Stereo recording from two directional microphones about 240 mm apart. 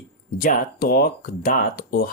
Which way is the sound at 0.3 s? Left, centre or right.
Left.